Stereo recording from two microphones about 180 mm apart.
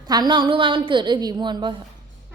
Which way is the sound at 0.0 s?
25° right (ahead or behind).